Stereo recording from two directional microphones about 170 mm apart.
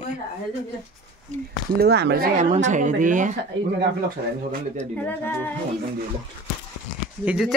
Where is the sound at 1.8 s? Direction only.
75° right (ahead or behind).